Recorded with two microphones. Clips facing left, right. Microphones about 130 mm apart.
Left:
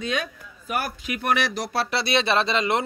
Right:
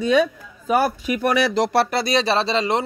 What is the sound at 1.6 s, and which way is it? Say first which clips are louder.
Speech: right 8 dB; 80° right.